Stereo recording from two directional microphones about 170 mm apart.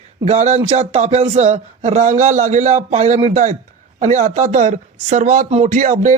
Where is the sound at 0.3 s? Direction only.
40° right (ahead or behind).